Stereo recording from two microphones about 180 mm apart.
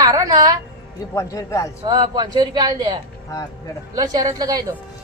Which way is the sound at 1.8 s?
20° right (ahead or behind).